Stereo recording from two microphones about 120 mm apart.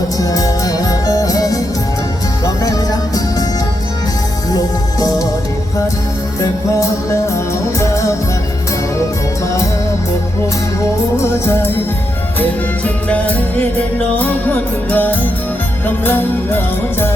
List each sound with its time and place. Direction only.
0.2 s music: 30° left (ahead or behind)
4.5 s music: 30° left (ahead or behind)
6.4 s music: 25° left (ahead or behind)
11.2 s music: 20° left (ahead or behind)